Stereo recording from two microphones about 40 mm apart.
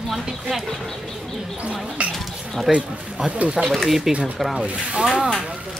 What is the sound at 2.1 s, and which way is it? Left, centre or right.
Bird, centre.